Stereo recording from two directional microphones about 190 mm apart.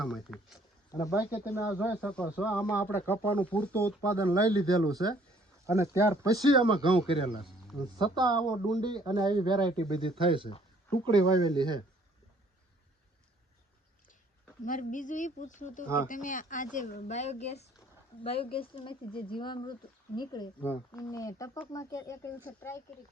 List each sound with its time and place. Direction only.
0.0 s speech: centre (ahead or behind)
0.9 s speech: 20° left (ahead or behind)
2.0 s speech: 5° left (ahead or behind)
4.4 s speech: 20° right (ahead or behind)
14.6 s speech: 45° left (ahead or behind)
17.7 s a sound: 30° left (ahead or behind)
18.5 s speech: 25° left (ahead or behind)